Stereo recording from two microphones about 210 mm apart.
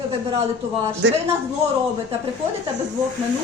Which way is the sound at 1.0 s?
55° right (ahead or behind).